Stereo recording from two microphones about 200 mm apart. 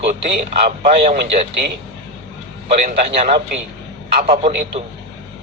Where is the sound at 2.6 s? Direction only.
35° right (ahead or behind).